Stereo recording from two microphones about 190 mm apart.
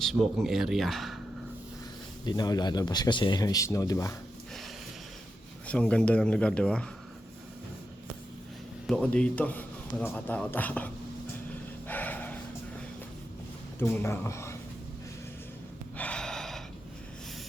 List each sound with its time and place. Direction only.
0.0 s speech: centre (ahead or behind)
2.2 s speech: 20° left (ahead or behind)
5.6 s speech: 5° left (ahead or behind)
8.9 s a man's voice: 5° left (ahead or behind)
11.9 s gasp: 10° left (ahead or behind)
13.7 s speech: 15° left (ahead or behind)
16.0 s gasp: 5° left (ahead or behind)